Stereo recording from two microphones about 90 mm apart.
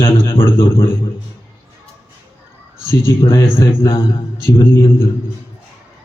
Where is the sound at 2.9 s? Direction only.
30° left (ahead or behind).